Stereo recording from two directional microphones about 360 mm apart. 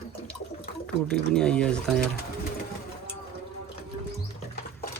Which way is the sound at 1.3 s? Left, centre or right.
Centre.